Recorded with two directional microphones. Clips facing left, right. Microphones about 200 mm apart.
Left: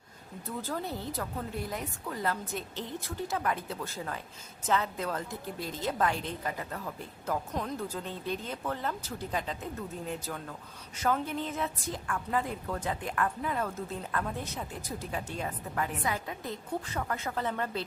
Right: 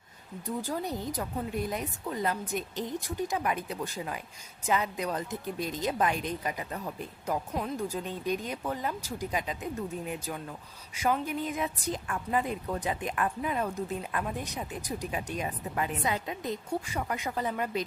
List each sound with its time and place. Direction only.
0.4 s a woman's voice: 15° right (ahead or behind)
7.5 s a woman's voice: 5° right (ahead or behind)